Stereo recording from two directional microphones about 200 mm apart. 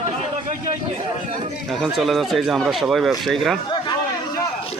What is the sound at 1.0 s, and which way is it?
Speech, 30° right (ahead or behind).